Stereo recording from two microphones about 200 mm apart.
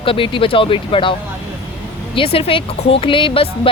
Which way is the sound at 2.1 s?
30° left (ahead or behind).